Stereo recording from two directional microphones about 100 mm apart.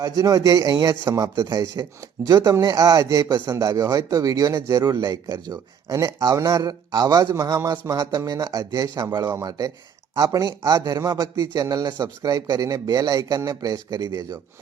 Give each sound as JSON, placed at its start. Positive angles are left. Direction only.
{"t": 0.0, "sound": "speech", "side_deg": -35}